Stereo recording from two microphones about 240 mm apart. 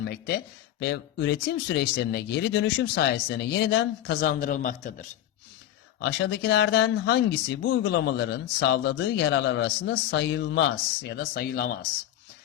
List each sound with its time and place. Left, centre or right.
0.0 s speech: left
6.0 s speech: left